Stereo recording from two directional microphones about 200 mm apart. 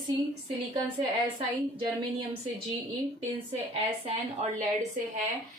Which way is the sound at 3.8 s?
30° right (ahead or behind).